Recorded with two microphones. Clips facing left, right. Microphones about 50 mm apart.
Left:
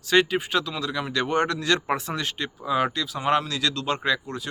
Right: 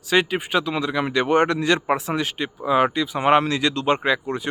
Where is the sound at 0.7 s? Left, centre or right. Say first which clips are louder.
Right 5 dB; right.